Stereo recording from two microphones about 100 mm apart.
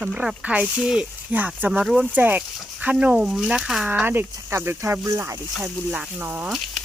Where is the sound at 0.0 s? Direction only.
10° right (ahead or behind).